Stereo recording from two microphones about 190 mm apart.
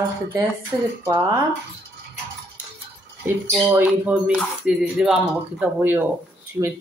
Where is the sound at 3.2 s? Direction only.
10° right (ahead or behind).